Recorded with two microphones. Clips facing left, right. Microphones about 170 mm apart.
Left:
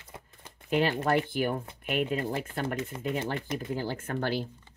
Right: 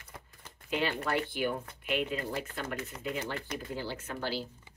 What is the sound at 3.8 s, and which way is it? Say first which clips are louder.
Speech: left 5 dB; 50° left (ahead or behind).